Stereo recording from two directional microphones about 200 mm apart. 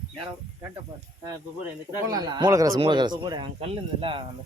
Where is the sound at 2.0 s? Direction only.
20° right (ahead or behind).